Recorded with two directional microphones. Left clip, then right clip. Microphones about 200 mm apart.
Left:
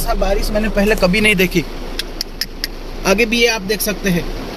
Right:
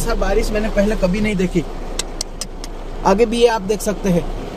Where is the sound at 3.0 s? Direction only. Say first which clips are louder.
Even; 30° left (ahead or behind).